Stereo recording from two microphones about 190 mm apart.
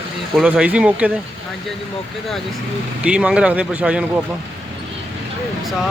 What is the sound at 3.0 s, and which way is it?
Speech, 5° right (ahead or behind).